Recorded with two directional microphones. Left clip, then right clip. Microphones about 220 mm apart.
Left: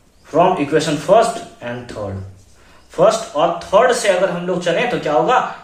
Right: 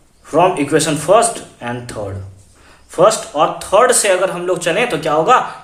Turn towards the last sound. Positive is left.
turn(degrees=-50)  # may be behind; listen again after turning